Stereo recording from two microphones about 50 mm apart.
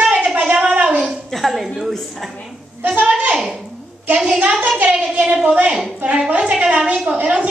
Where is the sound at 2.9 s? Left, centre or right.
Right.